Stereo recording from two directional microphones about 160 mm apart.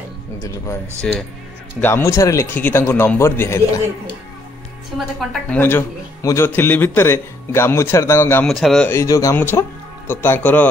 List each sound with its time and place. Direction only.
1.0 s speech: 5° left (ahead or behind)
1.8 s a man's voice: 15° left (ahead or behind)
4.9 s speech: centre (ahead or behind)
5.6 s a man's voice: 15° left (ahead or behind)
8.5 s speech: centre (ahead or behind)
8.9 s a man's voice: 20° left (ahead or behind)